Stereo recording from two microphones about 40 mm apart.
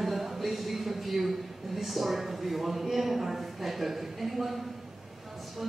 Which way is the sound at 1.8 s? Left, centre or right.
Centre.